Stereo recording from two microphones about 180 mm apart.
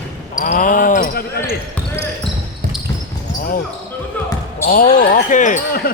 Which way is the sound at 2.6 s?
50° right (ahead or behind).